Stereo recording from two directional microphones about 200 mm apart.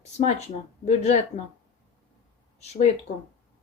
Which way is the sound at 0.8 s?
35° left (ahead or behind).